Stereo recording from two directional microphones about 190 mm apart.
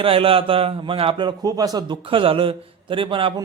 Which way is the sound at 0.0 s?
30° right (ahead or behind).